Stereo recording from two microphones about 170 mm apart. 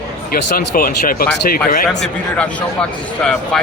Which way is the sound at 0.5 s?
60° left (ahead or behind).